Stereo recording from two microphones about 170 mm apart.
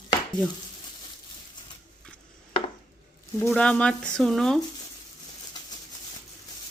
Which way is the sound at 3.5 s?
5° left (ahead or behind).